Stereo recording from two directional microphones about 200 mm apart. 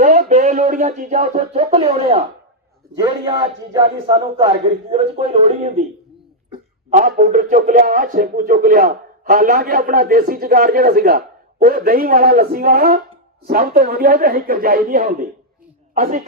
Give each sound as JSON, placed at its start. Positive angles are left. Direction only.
{"t": 0.0, "sound": "a sound", "side_deg": -40}
{"t": 2.9, "sound": "speech", "side_deg": -25}
{"t": 6.9, "sound": "speech", "side_deg": -40}